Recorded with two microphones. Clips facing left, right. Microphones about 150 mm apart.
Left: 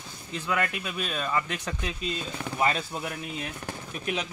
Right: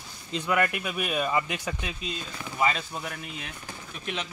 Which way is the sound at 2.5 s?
5° left (ahead or behind).